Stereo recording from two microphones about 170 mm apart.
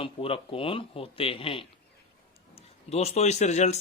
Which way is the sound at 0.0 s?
35° left (ahead or behind).